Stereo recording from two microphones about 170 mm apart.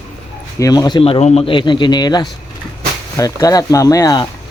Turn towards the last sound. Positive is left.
turn(degrees=20)  # may be behind; listen again after turning